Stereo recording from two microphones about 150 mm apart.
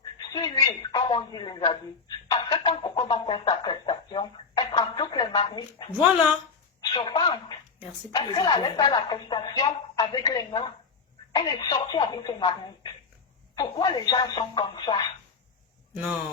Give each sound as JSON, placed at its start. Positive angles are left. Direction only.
{"t": 0.3, "sound": "a woman's voice", "side_deg": 30}
{"t": 6.9, "sound": "a woman's voice", "side_deg": 30}